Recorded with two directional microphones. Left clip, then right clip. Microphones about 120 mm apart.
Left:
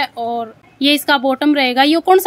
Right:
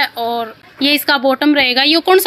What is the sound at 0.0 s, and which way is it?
A woman's voice, 20° left (ahead or behind).